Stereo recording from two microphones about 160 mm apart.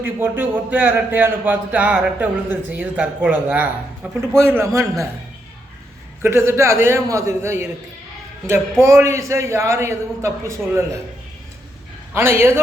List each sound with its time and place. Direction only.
0.0 s a man's voice: 15° right (ahead or behind)
6.2 s speech: 15° right (ahead or behind)
8.8 s speech: 20° right (ahead or behind)
12.1 s speech: 15° right (ahead or behind)